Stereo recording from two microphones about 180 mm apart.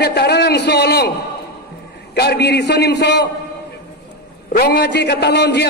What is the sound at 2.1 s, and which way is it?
A man's voice, 65° left (ahead or behind).